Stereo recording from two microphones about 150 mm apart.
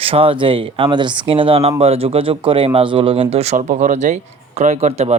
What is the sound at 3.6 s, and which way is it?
Speech, 60° right (ahead or behind).